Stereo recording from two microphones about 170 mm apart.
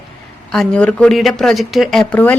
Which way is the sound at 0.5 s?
5° left (ahead or behind).